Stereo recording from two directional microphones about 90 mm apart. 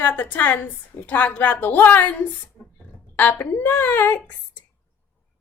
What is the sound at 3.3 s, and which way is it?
A woman's voice, 20° left (ahead or behind).